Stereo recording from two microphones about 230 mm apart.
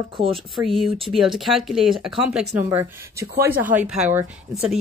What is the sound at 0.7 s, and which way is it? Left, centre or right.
Speech, centre.